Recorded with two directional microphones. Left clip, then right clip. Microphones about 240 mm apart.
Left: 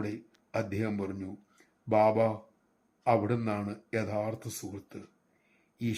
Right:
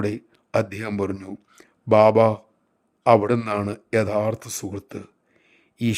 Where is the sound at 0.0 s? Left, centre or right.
Right.